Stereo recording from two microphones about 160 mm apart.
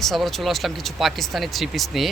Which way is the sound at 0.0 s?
Centre (ahead or behind).